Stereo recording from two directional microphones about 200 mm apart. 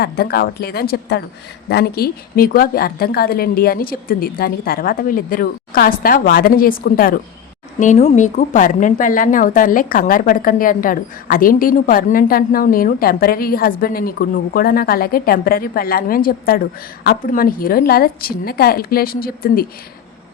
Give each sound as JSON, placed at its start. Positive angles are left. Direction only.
{"t": 0.0, "sound": "a woman's voice", "side_deg": 50}
{"t": 7.8, "sound": "a woman's voice", "side_deg": 35}